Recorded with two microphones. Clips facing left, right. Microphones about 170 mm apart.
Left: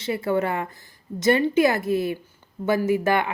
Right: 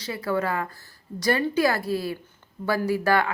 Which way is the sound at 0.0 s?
25° left (ahead or behind).